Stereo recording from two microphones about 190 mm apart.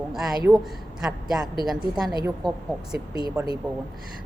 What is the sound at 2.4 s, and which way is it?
Speech, 20° right (ahead or behind).